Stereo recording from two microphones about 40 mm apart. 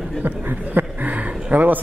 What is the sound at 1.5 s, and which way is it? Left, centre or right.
Speech, right.